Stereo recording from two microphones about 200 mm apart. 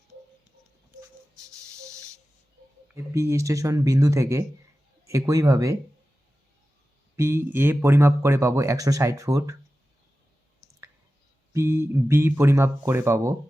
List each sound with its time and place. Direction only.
2.9 s speech: 15° right (ahead or behind)
7.2 s speech: 10° right (ahead or behind)
11.5 s speech: 15° right (ahead or behind)